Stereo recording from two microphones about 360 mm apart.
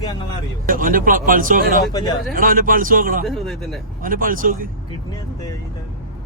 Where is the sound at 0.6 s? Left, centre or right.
Right.